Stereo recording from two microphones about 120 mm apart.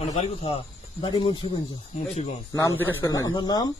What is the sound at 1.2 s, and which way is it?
Speech, 45° left (ahead or behind).